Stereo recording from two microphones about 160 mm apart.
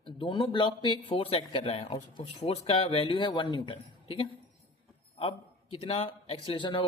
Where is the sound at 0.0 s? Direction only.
30° left (ahead or behind).